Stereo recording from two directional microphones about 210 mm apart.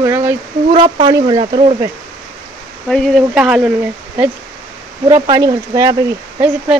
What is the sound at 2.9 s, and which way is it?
Speech, 5° left (ahead or behind).